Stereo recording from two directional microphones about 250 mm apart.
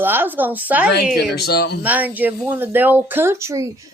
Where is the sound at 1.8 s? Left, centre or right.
Centre.